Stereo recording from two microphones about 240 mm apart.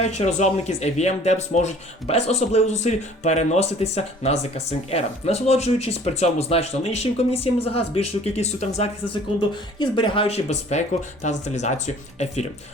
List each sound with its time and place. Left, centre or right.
0.0 s speech: left